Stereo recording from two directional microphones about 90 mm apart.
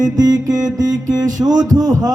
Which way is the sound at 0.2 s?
45° right (ahead or behind).